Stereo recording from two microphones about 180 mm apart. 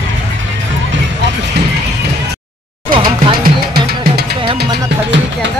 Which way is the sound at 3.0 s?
55° right (ahead or behind).